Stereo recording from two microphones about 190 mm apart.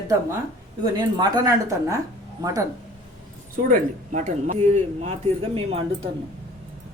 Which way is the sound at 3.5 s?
50° right (ahead or behind).